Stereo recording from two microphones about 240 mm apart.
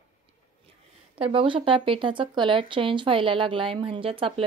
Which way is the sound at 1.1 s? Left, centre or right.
Right.